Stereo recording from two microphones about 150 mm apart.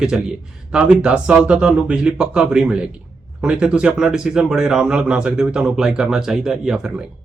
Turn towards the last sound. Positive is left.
turn(degrees=-5)  # may be behind; listen again after turning